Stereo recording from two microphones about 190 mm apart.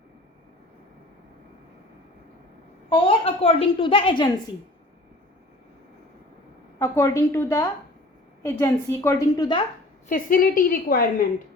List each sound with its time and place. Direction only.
2.9 s a woman's voice: 30° left (ahead or behind)
6.7 s a woman's voice: 15° left (ahead or behind)
10.1 s a woman's voice: 45° left (ahead or behind)